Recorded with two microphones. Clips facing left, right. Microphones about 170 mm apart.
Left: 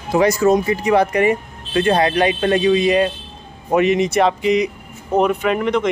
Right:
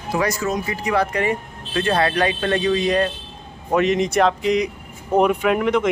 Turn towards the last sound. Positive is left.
turn(degrees=-5)  # may be behind; listen again after turning